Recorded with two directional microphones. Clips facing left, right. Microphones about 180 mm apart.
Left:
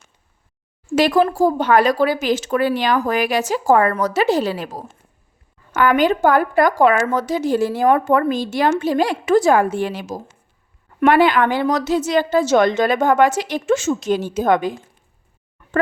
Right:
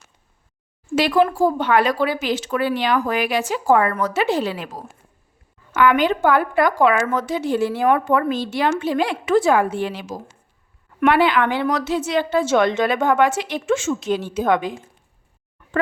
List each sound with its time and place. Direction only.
0.9 s a woman's voice: 45° left (ahead or behind)
5.7 s a woman's voice: 45° left (ahead or behind)